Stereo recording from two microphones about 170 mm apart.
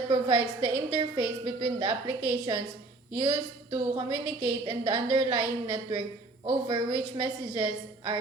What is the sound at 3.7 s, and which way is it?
A woman's voice, 25° right (ahead or behind).